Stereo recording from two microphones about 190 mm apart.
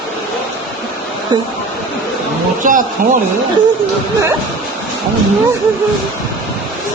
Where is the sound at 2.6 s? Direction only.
45° right (ahead or behind).